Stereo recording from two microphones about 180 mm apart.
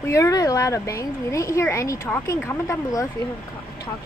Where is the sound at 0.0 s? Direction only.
15° left (ahead or behind).